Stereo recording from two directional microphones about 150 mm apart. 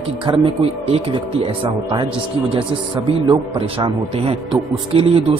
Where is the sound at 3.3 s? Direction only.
35° right (ahead or behind).